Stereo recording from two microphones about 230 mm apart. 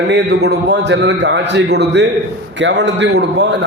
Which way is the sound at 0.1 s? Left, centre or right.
Right.